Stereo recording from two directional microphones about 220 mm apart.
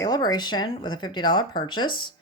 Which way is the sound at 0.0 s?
20° left (ahead or behind).